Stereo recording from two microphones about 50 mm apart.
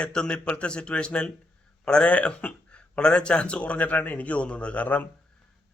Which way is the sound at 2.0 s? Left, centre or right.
Left.